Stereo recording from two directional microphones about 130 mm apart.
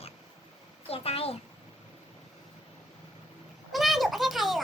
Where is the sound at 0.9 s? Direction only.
50° left (ahead or behind).